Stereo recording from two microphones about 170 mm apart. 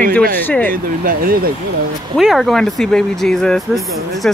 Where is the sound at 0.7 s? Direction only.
55° right (ahead or behind).